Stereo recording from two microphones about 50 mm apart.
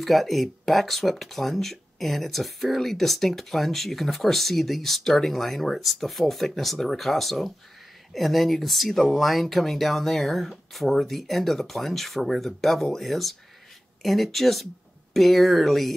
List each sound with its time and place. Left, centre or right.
0.0 s speech: centre